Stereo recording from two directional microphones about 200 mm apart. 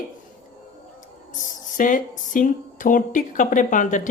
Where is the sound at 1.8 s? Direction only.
40° left (ahead or behind).